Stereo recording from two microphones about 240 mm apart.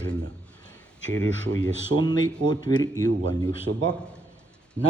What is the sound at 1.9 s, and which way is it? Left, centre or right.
Speech, right.